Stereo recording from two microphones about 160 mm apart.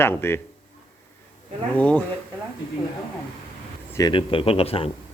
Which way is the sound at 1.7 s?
10° left (ahead or behind).